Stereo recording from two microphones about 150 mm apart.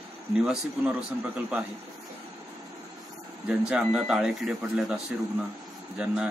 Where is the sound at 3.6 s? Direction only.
5° right (ahead or behind).